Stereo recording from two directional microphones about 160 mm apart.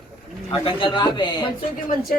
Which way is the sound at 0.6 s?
30° left (ahead or behind).